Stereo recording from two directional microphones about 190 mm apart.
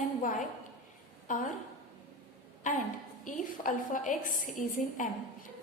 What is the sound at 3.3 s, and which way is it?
A woman's voice, 45° left (ahead or behind).